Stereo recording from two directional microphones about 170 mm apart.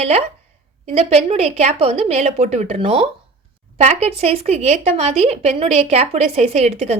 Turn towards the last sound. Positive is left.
turn(degrees=-35)  # may be behind; listen again after turning